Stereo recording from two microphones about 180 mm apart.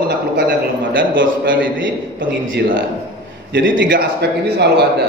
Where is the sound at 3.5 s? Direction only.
70° right (ahead or behind).